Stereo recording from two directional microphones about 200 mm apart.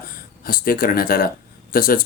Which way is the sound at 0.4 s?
45° left (ahead or behind).